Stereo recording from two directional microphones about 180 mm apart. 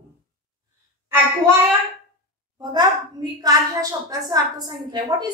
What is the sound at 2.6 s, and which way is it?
A woman's voice, 25° right (ahead or behind).